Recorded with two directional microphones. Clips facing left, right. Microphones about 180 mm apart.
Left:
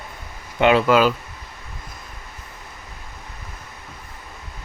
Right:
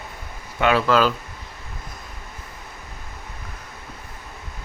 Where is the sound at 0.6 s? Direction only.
20° left (ahead or behind).